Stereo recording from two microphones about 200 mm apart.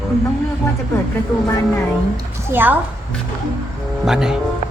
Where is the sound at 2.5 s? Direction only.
10° right (ahead or behind).